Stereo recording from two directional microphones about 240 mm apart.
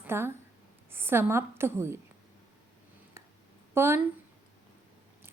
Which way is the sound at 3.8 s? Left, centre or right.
Centre.